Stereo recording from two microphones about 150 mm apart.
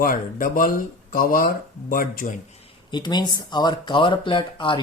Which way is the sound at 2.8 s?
30° left (ahead or behind).